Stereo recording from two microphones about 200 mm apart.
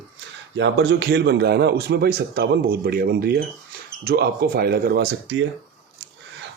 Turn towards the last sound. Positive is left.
turn(degrees=-55)  # may be behind; listen again after turning